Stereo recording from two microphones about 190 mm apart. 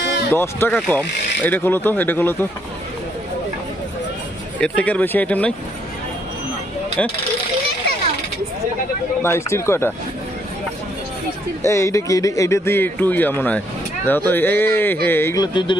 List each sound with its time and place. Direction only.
0.3 s speech: 15° left (ahead or behind)
4.6 s speech: 5° left (ahead or behind)
7.0 s speech: 5° left (ahead or behind)
9.2 s speech: 15° left (ahead or behind)
11.6 s speech: 15° left (ahead or behind)